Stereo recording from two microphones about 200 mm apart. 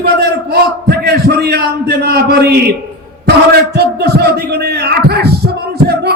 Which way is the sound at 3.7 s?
50° right (ahead or behind).